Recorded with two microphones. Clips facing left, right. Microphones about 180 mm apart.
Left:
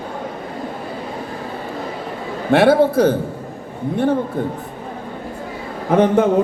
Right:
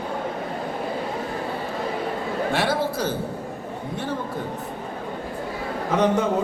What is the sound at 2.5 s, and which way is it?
Speech, 60° left (ahead or behind).